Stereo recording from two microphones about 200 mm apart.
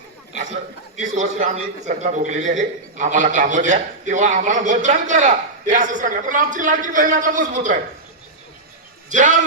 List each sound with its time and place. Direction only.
0.9 s a man's voice: 35° right (ahead or behind)
9.0 s a man's voice: 40° right (ahead or behind)